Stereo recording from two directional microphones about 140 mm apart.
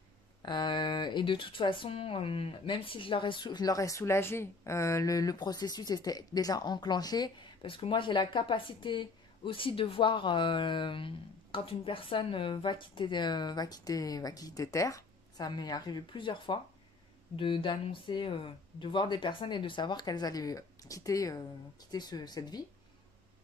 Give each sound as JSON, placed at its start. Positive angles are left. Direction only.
{"t": 0.4, "sound": "speech", "side_deg": 30}